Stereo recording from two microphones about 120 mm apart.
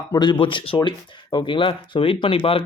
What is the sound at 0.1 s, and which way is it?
Speech, 40° left (ahead or behind).